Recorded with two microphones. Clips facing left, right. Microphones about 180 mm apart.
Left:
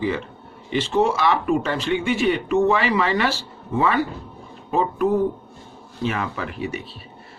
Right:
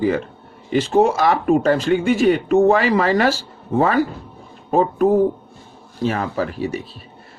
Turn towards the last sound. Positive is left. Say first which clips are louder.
# right 6 dB
turn(degrees=-35)  # may be behind; listen again after turning